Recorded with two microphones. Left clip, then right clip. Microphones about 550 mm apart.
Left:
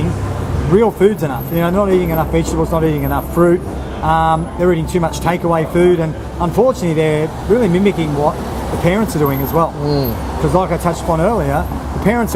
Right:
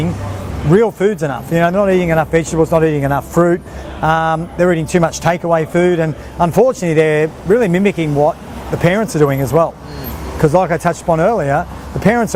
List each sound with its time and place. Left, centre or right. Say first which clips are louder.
0.8 s speech: left 2 dB; right